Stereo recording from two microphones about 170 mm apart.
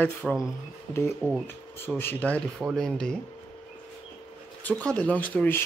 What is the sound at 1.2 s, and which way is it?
Speech, 15° left (ahead or behind).